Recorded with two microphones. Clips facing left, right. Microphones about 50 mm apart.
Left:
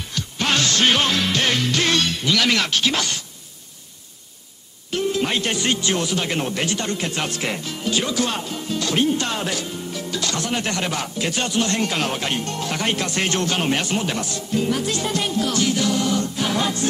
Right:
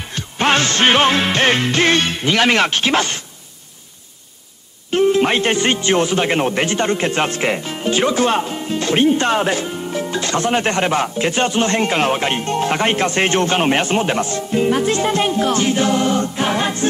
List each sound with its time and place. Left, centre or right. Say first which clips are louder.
0.0 s music: right 6 dB; right
4.9 s speech: right 8 dB; right